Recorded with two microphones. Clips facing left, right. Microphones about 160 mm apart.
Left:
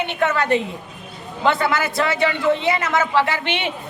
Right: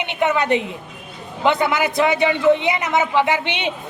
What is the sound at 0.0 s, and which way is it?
A woman's voice, 15° right (ahead or behind).